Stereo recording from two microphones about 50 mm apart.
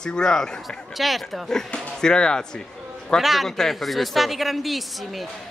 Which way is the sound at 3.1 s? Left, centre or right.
Centre.